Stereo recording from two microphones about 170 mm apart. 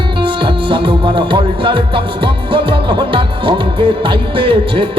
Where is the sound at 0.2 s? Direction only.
30° right (ahead or behind).